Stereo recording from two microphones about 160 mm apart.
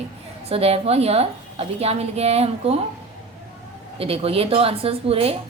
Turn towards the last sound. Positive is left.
turn(degrees=-40)  # may be behind; listen again after turning